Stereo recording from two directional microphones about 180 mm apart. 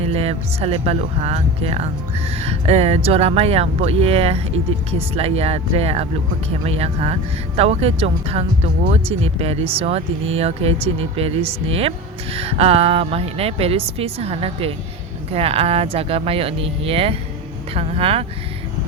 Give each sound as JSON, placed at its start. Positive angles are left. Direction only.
{"t": 0.0, "sound": "speech", "side_deg": -35}